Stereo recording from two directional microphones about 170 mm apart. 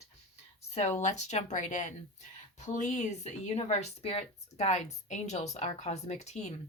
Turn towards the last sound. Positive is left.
turn(degrees=40)  # may be behind; listen again after turning